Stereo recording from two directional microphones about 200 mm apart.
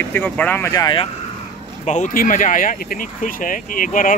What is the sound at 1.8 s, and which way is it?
Speech, 40° left (ahead or behind).